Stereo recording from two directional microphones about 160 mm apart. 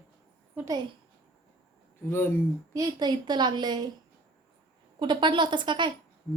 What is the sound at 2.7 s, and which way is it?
A woman's voice, 25° right (ahead or behind).